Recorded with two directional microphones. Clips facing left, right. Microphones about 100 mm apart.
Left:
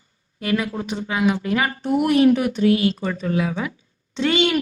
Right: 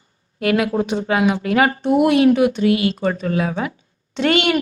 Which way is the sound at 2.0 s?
80° right.